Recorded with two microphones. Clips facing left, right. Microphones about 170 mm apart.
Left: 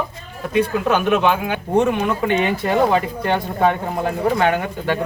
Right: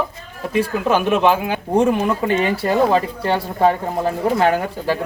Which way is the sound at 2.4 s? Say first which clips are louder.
Right 1 dB; 35° right (ahead or behind).